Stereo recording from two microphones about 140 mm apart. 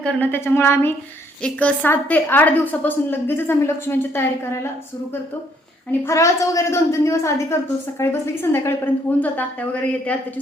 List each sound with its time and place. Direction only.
0.0 s a woman's voice: 10° left (ahead or behind)
5.9 s a woman's voice: 20° left (ahead or behind)